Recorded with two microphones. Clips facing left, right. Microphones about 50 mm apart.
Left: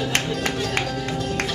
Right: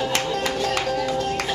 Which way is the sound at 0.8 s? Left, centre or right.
Right.